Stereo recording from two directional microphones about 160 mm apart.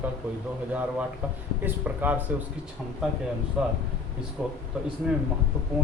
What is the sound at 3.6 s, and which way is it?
Speech, 5° right (ahead or behind).